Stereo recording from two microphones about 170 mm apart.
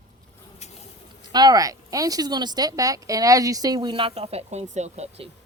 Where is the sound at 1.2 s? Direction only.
25° right (ahead or behind).